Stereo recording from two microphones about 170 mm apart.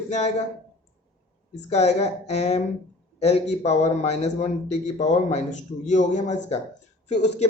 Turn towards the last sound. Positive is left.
turn(degrees=40)  # may be behind; listen again after turning